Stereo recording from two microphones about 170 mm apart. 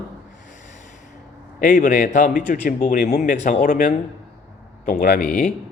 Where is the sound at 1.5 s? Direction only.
50° left (ahead or behind).